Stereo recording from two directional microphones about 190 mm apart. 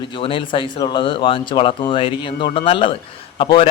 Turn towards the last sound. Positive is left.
turn(degrees=25)  # may be behind; listen again after turning